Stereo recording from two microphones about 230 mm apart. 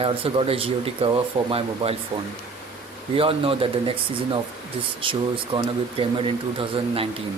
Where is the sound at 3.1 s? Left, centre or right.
Right.